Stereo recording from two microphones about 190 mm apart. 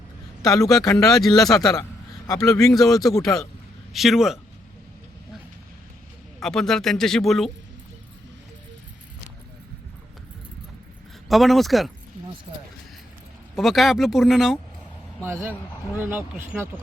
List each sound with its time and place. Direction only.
0.4 s speech: 20° left (ahead or behind)
1.1 s speech: centre (ahead or behind)
1.5 s a man's voice: 20° left (ahead or behind)
3.9 s speech: centre (ahead or behind)
6.4 s speech: centre (ahead or behind)
11.3 s speech: centre (ahead or behind)
13.6 s speech: centre (ahead or behind)
15.2 s speech: 10° right (ahead or behind)